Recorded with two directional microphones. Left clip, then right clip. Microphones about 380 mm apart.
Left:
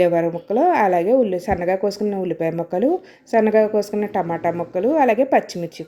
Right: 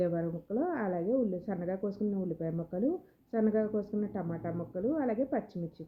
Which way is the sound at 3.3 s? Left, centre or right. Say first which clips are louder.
Left 15 dB; centre.